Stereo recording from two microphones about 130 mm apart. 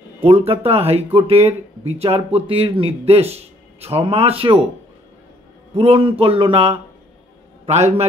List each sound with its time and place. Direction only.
0.2 s speech: 50° right (ahead or behind)
5.8 s a man's voice: 45° right (ahead or behind)